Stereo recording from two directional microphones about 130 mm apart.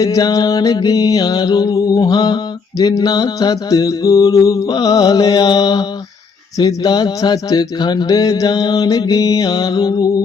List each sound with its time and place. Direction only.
0.0 s mantra: 30° left (ahead or behind)